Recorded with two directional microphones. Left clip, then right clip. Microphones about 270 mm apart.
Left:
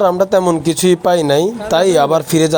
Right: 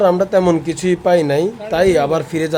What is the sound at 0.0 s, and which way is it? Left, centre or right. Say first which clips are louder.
Speech: left 1 dB; centre.